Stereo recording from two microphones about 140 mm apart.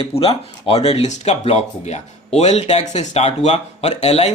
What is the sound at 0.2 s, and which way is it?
Speech, 45° left (ahead or behind).